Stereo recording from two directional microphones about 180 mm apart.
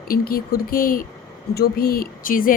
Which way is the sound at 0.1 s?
55° left (ahead or behind).